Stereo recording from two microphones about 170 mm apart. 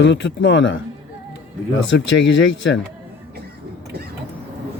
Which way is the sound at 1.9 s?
90° left.